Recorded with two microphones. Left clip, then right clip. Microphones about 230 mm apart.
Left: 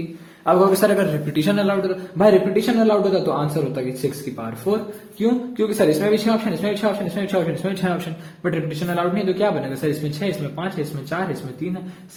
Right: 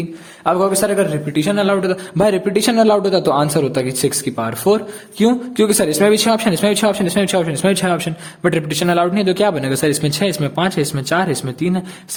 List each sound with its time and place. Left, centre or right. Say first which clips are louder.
0.4 s a man's voice: even; right